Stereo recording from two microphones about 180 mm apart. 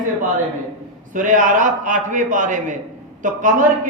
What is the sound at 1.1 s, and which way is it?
A man's voice, 45° right (ahead or behind).